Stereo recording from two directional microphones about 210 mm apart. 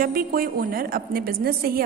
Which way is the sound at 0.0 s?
45° right (ahead or behind).